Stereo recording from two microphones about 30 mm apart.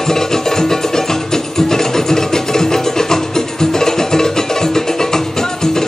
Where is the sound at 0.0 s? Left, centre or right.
Centre.